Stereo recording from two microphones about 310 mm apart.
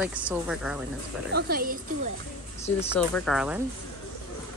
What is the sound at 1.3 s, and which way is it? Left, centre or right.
Speech, right.